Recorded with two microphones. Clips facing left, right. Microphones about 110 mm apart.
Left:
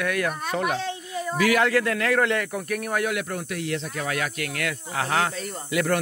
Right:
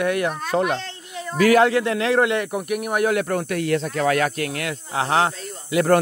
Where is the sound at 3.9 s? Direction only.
75° right (ahead or behind).